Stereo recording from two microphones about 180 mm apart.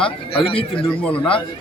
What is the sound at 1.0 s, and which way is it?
Speech, 5° left (ahead or behind).